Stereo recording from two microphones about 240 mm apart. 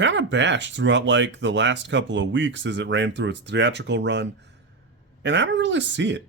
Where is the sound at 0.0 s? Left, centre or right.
Right.